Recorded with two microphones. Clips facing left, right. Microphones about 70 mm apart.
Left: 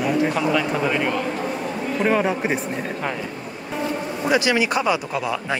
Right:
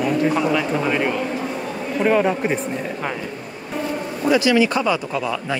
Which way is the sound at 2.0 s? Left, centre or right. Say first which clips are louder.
Right 3 dB; centre.